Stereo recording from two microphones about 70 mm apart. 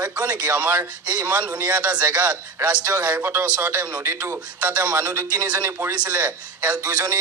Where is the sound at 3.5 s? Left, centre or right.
Right.